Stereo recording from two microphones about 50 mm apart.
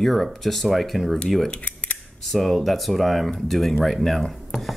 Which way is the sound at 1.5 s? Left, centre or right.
Left.